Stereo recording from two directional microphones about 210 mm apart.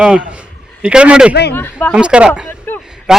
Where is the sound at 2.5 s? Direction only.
10° left (ahead or behind).